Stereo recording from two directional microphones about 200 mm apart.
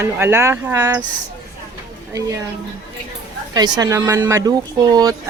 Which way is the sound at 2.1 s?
15° right (ahead or behind).